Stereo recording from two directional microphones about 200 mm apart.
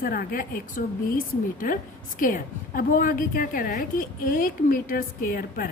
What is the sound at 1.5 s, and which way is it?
A woman's voice, 45° left (ahead or behind).